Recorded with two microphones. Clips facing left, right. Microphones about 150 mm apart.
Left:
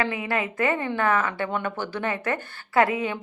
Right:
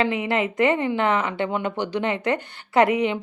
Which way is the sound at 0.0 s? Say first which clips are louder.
Right 4 dB; 20° right (ahead or behind).